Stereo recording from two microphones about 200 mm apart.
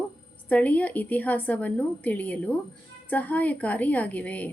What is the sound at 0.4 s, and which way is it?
A woman's voice, 5° left (ahead or behind).